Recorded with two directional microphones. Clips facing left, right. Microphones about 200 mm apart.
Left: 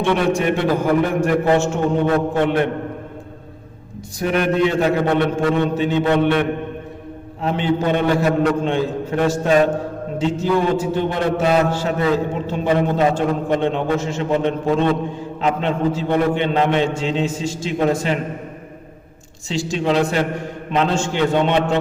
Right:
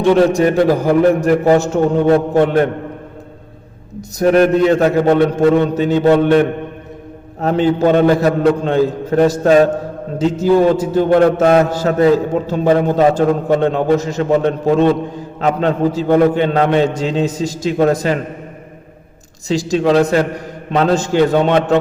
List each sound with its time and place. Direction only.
0.0 s a man's voice: 40° right (ahead or behind)
4.2 s a man's voice: 40° right (ahead or behind)
7.4 s a man's voice: 40° right (ahead or behind)
19.5 s a man's voice: 40° right (ahead or behind)